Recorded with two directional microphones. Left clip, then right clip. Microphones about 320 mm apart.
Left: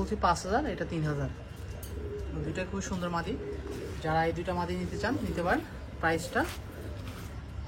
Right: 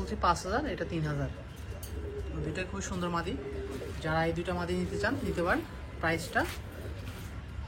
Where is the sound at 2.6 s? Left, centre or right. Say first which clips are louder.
Left 1 dB; left.